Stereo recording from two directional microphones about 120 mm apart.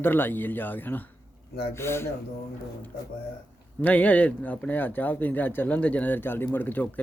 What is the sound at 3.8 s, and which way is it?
Speech, 15° left (ahead or behind).